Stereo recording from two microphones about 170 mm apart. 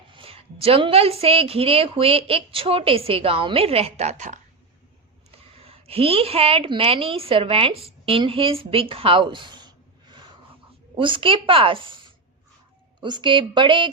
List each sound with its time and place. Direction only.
0.1 s a woman's voice: 30° right (ahead or behind)
5.5 s a woman's voice: 35° right (ahead or behind)